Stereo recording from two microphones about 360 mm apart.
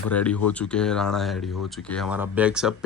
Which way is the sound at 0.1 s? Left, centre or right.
Centre.